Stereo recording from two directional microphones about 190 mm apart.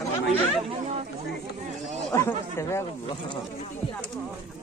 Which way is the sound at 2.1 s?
15° left (ahead or behind).